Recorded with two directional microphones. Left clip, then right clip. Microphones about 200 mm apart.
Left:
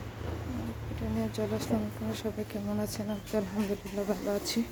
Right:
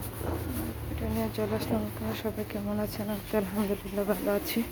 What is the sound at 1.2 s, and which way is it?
Speech, 10° left (ahead or behind).